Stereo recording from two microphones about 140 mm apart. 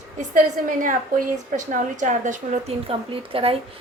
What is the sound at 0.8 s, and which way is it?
A woman's voice, 70° right (ahead or behind).